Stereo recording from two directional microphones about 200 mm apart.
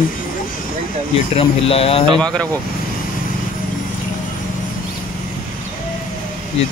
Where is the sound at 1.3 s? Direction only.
30° left (ahead or behind).